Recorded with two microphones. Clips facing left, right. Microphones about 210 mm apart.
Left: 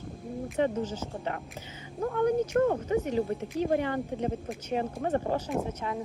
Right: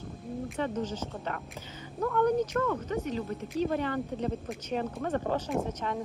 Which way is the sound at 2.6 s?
40° left (ahead or behind).